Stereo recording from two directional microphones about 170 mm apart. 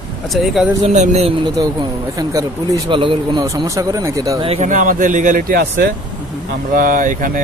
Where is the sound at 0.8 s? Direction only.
40° right (ahead or behind).